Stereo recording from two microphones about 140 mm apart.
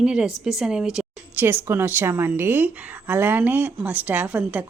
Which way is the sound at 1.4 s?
15° right (ahead or behind).